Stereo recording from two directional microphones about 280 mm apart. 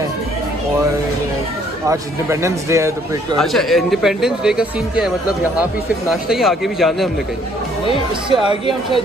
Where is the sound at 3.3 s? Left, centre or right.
Centre.